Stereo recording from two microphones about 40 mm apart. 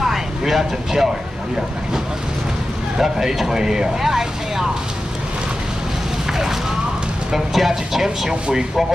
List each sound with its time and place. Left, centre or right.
0.0 s vehicle: centre
3.0 s speech: centre
7.3 s speech: centre